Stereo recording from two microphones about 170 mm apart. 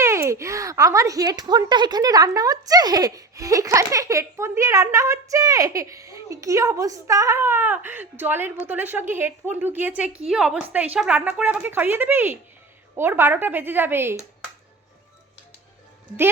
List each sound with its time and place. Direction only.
0.0 s a woman's voice: 15° right (ahead or behind)